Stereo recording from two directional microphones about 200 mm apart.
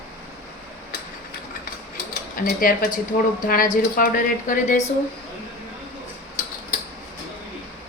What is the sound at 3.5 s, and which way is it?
A woman's voice, 45° left (ahead or behind).